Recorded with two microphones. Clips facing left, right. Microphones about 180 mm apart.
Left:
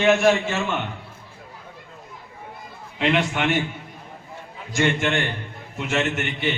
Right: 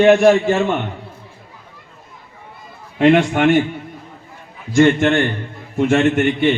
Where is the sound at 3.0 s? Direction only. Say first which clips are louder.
Right 9 dB; 45° right (ahead or behind).